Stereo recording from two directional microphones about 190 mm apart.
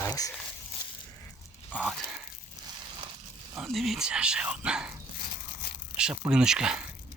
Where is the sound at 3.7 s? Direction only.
Centre (ahead or behind).